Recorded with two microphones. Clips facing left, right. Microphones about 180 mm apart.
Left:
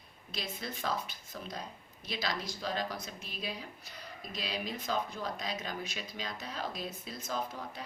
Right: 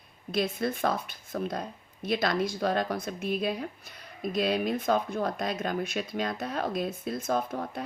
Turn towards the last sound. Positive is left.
turn(degrees=-55)  # may be behind; listen again after turning